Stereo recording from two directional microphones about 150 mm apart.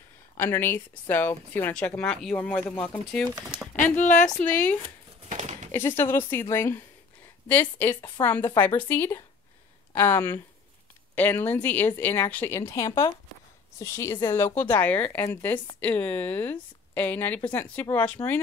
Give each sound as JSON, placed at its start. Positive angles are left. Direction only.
{"t": 0.4, "sound": "speech", "side_deg": 15}
{"t": 3.9, "sound": "a woman's voice", "side_deg": 55}
{"t": 4.3, "sound": "speech", "side_deg": 10}
{"t": 4.8, "sound": "a sound", "side_deg": -45}
{"t": 5.7, "sound": "a woman's voice", "side_deg": 15}